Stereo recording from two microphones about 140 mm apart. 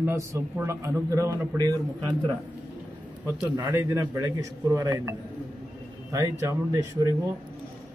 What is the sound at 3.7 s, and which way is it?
A man's voice, 20° right (ahead or behind).